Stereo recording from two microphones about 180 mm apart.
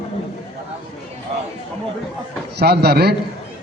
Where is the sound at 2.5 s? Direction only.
65° right (ahead or behind).